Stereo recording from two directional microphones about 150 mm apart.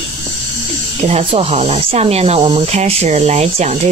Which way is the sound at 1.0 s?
40° right (ahead or behind).